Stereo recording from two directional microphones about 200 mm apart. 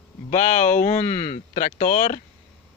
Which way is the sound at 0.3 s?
40° left (ahead or behind).